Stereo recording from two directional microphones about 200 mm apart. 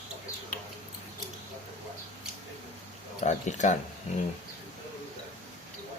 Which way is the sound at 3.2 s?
35° left (ahead or behind).